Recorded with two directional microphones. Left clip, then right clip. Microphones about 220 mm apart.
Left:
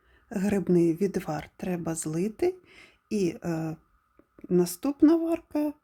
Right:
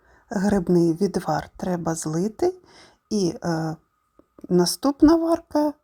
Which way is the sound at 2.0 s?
Centre (ahead or behind).